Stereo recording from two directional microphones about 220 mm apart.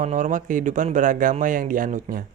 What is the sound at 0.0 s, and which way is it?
A man's voice, 35° right (ahead or behind).